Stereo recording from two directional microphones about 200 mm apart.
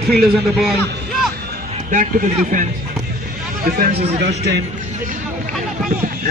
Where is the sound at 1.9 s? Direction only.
40° right (ahead or behind).